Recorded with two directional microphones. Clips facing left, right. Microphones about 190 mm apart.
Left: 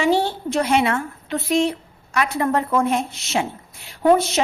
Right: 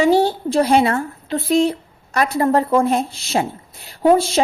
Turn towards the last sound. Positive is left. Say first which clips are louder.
# right 2 dB
turn(degrees=-30)  # may be behind; listen again after turning